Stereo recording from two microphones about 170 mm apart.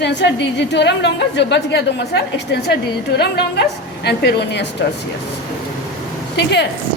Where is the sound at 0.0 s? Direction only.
90° left.